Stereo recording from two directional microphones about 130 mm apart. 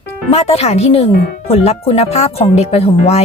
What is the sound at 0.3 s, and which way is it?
Speech, 55° left (ahead or behind).